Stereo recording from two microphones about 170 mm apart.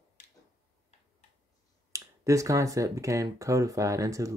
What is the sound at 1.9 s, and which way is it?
Speech, 20° right (ahead or behind).